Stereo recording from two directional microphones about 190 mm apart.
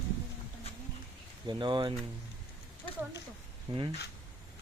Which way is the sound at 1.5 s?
25° right (ahead or behind).